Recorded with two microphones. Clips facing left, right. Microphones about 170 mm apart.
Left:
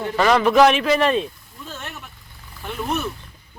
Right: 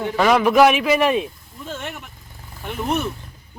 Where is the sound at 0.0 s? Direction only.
5° right (ahead or behind).